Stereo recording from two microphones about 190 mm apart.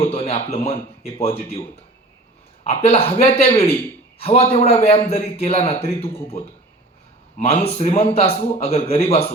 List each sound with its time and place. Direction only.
0.0 s a man's voice: 30° left (ahead or behind)
2.6 s a man's voice: 30° left (ahead or behind)